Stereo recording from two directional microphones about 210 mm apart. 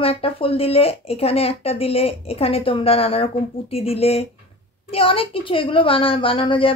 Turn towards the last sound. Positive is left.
turn(degrees=25)  # may be behind; listen again after turning